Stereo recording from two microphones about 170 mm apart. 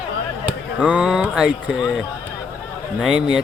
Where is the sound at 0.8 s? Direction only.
5° right (ahead or behind).